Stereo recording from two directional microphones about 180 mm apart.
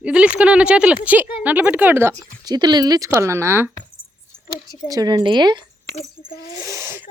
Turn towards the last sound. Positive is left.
turn(degrees=-15)  # may be behind; listen again after turning